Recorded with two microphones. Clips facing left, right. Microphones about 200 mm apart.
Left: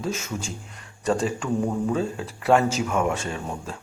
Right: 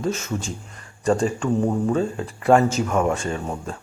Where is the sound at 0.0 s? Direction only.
10° left (ahead or behind).